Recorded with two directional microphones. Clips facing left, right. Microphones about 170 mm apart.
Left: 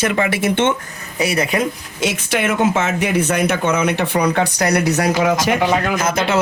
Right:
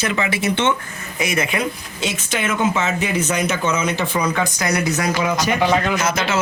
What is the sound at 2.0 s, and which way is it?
Speech, 60° left (ahead or behind).